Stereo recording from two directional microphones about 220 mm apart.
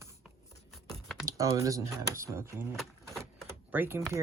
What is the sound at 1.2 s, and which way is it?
Speech, 15° right (ahead or behind).